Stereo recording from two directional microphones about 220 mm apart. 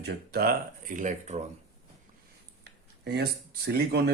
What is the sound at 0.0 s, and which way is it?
Speech, 45° right (ahead or behind).